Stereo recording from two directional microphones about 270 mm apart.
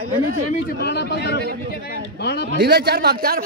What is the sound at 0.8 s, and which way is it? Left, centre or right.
Speech, left.